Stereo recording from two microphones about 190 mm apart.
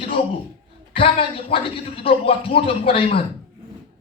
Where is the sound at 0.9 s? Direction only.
30° left (ahead or behind).